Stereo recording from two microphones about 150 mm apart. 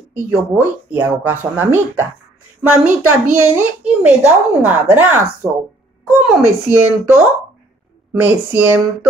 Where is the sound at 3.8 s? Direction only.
5° right (ahead or behind).